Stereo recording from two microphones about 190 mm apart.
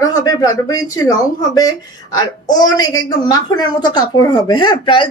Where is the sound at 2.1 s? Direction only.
20° left (ahead or behind).